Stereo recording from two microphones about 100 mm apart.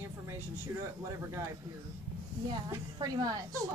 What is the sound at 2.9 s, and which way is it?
Speech, 45° right (ahead or behind).